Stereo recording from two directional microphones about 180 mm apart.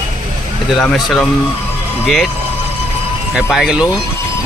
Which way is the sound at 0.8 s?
5° left (ahead or behind).